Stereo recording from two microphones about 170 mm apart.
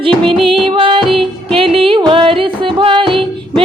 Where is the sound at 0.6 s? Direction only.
30° right (ahead or behind).